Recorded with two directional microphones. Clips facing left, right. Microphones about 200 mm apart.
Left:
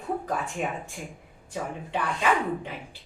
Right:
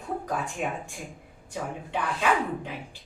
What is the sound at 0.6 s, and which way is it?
Speech, centre (ahead or behind).